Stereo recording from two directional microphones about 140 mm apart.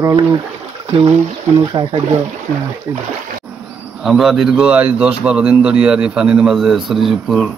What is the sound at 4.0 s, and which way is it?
A man's voice, centre (ahead or behind).